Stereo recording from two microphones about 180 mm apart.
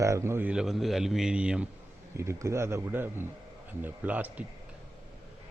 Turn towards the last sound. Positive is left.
turn(degrees=-10)  # may be behind; listen again after turning